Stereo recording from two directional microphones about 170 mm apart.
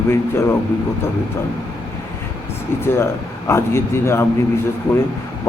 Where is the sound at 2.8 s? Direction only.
15° left (ahead or behind).